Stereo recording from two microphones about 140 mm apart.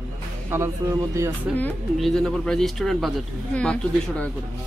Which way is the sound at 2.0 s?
Centre (ahead or behind).